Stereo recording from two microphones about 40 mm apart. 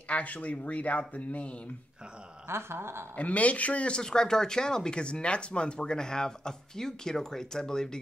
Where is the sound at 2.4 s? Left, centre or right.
Right.